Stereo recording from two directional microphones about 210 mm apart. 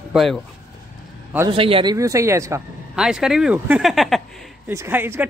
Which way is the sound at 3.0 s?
Centre (ahead or behind).